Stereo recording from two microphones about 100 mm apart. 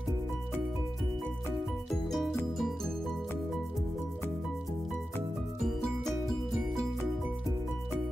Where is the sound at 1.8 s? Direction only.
Centre (ahead or behind).